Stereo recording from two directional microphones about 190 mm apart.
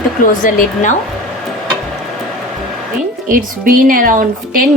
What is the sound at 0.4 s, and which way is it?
Speech, 45° left (ahead or behind).